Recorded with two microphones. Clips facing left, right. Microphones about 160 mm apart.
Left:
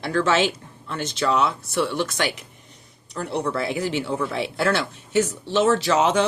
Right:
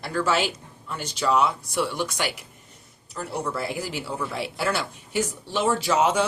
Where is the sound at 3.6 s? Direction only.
65° left (ahead or behind).